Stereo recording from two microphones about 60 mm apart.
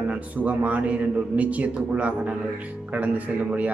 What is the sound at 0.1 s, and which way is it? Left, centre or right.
A man's voice, right.